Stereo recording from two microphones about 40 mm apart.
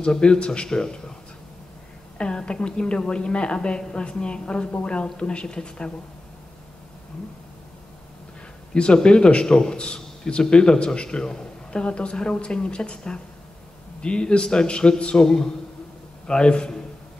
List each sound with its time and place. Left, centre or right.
0.1 s a man's voice: left
2.1 s a man's voice: left
8.7 s a man's voice: left